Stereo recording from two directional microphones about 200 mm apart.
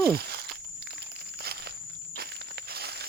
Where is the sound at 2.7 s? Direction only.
55° right (ahead or behind).